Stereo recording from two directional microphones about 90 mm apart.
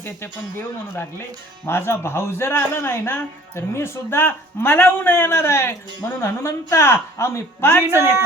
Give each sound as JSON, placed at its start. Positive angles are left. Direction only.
{"t": 1.6, "sound": "speech", "side_deg": 25}